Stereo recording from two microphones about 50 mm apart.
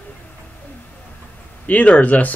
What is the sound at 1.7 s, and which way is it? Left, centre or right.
Speech, left.